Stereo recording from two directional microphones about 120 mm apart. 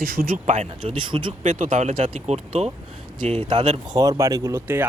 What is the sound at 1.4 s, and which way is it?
Speech, 90° right.